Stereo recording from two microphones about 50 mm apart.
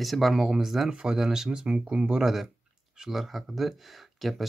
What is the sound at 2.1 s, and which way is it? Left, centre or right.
Speech, centre.